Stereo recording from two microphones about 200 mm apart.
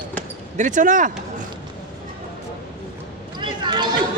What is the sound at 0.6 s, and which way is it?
Speech, 40° right (ahead or behind).